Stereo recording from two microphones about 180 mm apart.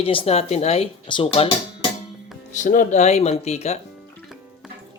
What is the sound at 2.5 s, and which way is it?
Speech, 45° left (ahead or behind).